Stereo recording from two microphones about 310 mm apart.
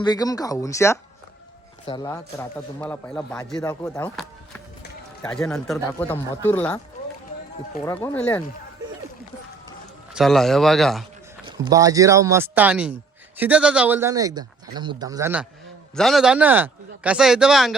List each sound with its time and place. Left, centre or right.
0.0 s a man's voice: centre
7.9 s speech: centre
10.2 s speech: centre
11.4 s speech: centre